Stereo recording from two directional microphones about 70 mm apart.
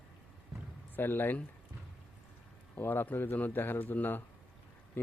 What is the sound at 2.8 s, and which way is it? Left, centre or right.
Speech, left.